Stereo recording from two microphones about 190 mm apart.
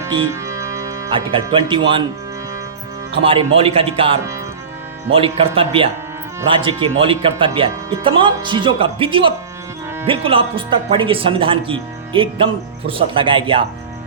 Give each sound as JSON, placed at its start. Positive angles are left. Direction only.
{"t": 0.0, "sound": "music", "side_deg": -15}
{"t": 1.1, "sound": "speech", "side_deg": -25}
{"t": 3.1, "sound": "speech", "side_deg": -30}